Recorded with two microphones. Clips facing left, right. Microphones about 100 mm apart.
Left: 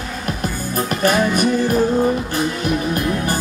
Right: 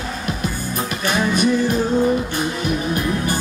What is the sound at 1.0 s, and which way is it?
Music, 45° left (ahead or behind).